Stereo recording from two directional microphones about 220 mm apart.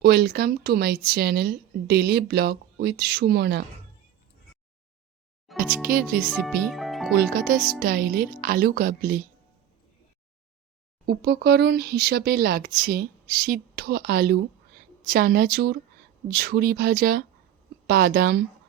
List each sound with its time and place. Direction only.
0.0 s speech: 45° right (ahead or behind)
5.5 s speech: 40° right (ahead or behind)
6.3 s music: centre (ahead or behind)
7.1 s speech: 45° right (ahead or behind)
11.0 s speech: 45° right (ahead or behind)